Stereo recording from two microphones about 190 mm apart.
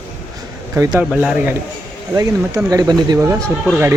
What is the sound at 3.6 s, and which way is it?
Speech, 5° right (ahead or behind).